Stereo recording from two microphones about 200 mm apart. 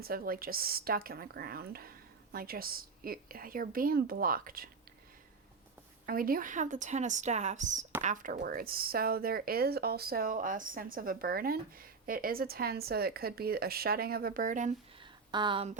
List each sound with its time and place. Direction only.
0.0 s speech: 45° right (ahead or behind)
6.1 s a woman's voice: 45° right (ahead or behind)
15.3 s speech: 25° right (ahead or behind)